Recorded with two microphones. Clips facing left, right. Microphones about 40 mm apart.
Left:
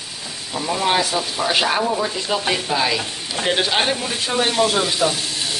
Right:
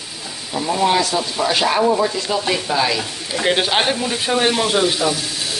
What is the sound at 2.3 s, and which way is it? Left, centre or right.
Speech, left.